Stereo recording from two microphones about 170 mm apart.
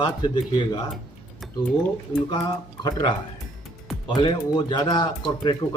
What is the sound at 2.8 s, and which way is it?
Speech, 20° left (ahead or behind).